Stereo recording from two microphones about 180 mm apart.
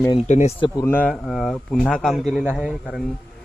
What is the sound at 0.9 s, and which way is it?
A man's voice, 10° left (ahead or behind).